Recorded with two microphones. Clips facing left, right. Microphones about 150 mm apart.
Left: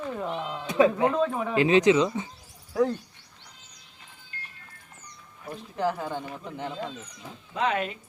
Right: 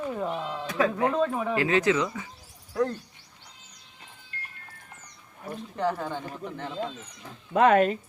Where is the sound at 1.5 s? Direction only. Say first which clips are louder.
Left 6 dB; 20° left (ahead or behind).